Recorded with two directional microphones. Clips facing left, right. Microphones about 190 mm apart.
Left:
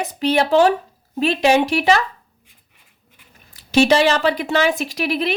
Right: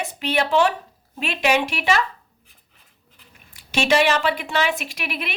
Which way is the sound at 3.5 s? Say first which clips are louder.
Left 5 dB; 40° left (ahead or behind).